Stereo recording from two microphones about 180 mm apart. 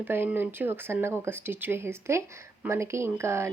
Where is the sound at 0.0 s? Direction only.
10° right (ahead or behind).